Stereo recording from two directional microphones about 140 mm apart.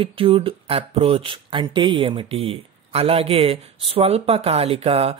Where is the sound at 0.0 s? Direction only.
40° right (ahead or behind).